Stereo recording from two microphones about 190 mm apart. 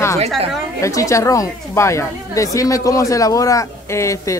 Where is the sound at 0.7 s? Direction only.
15° left (ahead or behind).